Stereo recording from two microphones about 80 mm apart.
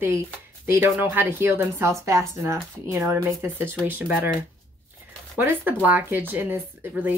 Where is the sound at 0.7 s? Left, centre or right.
Right.